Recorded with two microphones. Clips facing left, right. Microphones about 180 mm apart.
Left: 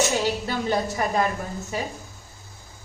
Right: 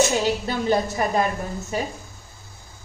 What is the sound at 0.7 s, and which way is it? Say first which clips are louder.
Speech: right 4 dB; 20° right (ahead or behind).